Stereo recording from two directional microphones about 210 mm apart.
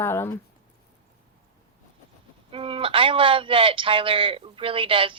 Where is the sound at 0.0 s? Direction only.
10° left (ahead or behind).